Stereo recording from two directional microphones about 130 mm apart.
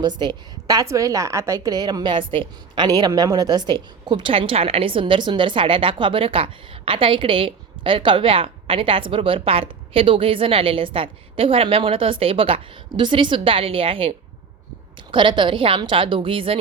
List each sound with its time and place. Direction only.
0.0 s a woman's voice: 35° right (ahead or behind)